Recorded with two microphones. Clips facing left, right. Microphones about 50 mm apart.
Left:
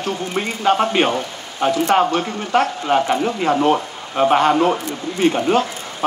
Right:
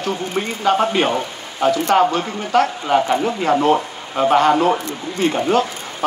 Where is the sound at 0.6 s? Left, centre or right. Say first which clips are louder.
Even; left.